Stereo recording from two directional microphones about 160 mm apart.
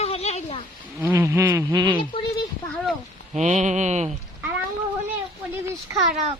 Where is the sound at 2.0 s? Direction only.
30° left (ahead or behind).